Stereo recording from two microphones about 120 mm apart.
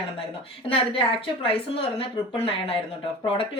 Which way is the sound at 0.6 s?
50° left (ahead or behind).